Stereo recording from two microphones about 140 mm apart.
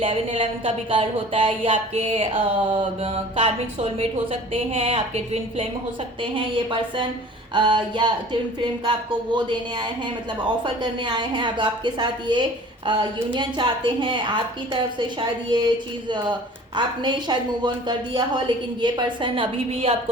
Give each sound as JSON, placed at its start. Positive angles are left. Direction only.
{"t": 0.0, "sound": "a woman's voice", "side_deg": -40}
{"t": 6.3, "sound": "a woman's voice", "side_deg": -35}